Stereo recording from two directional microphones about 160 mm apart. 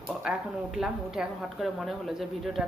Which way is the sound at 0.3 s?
5° right (ahead or behind).